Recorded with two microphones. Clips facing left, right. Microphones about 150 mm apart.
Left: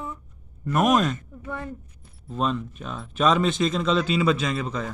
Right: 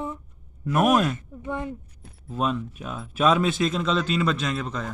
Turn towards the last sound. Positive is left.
turn(degrees=0)  # may be behind; listen again after turning